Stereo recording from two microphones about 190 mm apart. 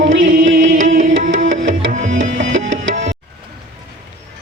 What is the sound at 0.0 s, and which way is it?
Music, 90° right.